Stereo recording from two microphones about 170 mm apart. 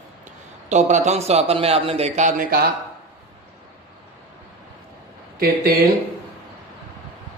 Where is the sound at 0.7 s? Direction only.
45° right (ahead or behind).